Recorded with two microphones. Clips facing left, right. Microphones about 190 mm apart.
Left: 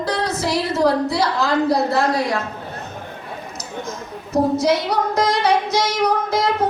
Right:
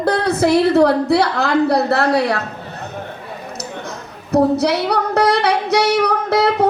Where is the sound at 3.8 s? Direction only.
65° right (ahead or behind).